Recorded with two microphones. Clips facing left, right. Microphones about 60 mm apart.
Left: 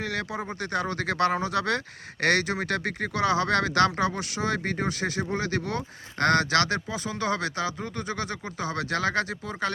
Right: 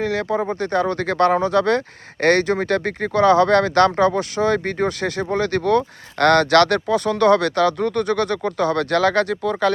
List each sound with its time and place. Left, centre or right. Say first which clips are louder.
0.0 s speech: right 10 dB; right